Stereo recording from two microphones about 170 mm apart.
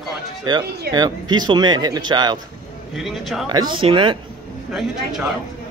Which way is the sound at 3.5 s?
25° right (ahead or behind).